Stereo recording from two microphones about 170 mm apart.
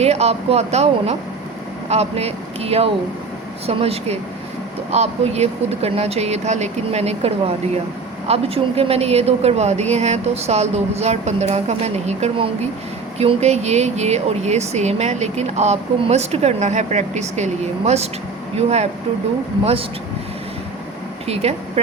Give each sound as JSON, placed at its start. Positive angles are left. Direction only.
{"t": 0.0, "sound": "speech", "side_deg": -40}